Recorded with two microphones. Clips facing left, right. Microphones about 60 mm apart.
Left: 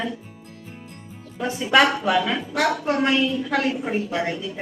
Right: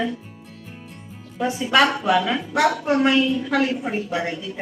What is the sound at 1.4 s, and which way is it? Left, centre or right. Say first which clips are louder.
Speech: even; centre.